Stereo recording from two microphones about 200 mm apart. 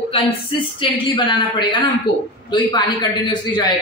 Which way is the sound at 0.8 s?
25° left (ahead or behind).